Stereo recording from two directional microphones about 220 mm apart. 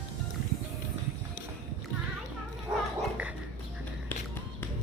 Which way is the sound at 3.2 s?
5° right (ahead or behind).